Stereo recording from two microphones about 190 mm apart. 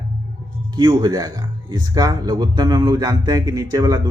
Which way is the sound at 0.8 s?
20° right (ahead or behind).